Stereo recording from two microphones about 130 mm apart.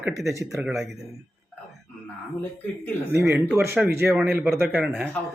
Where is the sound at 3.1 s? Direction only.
20° right (ahead or behind).